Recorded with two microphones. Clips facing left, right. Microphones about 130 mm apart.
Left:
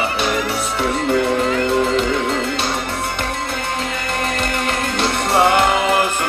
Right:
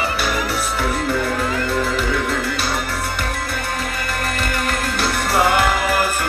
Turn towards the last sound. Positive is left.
turn(degrees=0)  # may be behind; listen again after turning